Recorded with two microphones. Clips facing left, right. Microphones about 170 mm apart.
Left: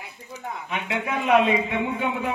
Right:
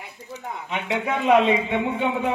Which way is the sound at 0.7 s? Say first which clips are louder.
Right 3 dB; 25° right (ahead or behind).